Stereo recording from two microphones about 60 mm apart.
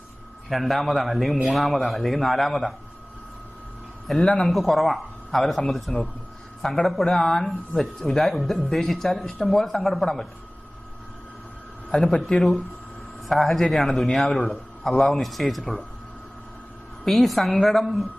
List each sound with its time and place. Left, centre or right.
0.5 s speech: centre
4.0 s speech: centre
12.2 s speech: centre
17.1 s speech: centre